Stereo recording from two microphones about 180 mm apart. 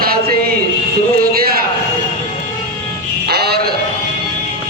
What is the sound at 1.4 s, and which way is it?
Speech, 55° right (ahead or behind).